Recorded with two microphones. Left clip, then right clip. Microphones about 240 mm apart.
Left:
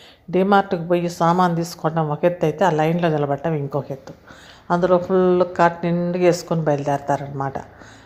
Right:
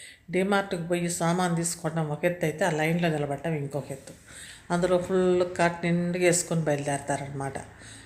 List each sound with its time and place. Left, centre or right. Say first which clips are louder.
0.3 s speech: left 9 dB; centre